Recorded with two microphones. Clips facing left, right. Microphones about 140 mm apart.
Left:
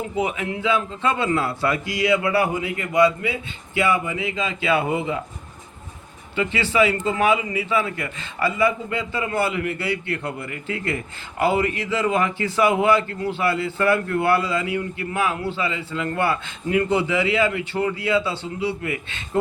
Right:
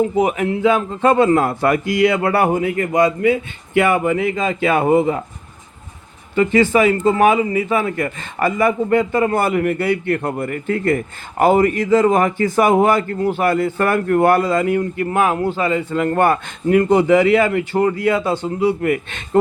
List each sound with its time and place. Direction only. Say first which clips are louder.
0.0 s a man's voice: right 8 dB; 40° right (ahead or behind)
6.3 s a man's voice: right 8 dB; 45° right (ahead or behind)